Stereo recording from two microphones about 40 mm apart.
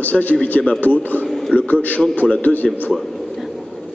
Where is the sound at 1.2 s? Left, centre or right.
Centre.